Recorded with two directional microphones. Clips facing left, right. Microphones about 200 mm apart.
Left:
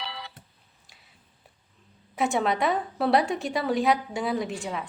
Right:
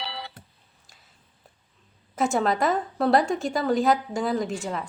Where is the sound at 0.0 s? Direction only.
30° right (ahead or behind).